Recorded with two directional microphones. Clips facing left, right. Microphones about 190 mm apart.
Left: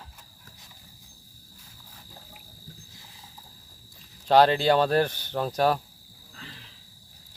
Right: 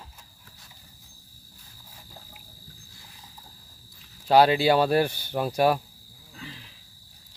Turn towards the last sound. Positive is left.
turn(degrees=-10)  # may be behind; listen again after turning